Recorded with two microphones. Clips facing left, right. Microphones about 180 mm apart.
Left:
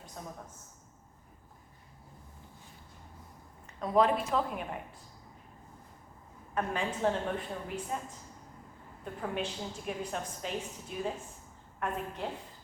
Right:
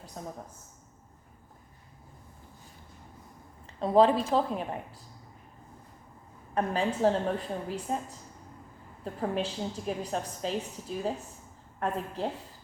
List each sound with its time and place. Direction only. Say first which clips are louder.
0.2 s a woman's voice: right 4 dB; 35° right (ahead or behind)
3.8 s a woman's voice: right 5 dB; 30° right (ahead or behind)
6.5 s a woman's voice: right 5 dB; 35° right (ahead or behind)
9.2 s a woman's voice: right 5 dB; 35° right (ahead or behind)